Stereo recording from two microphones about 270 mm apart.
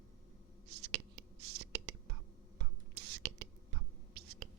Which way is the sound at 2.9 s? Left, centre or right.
Right.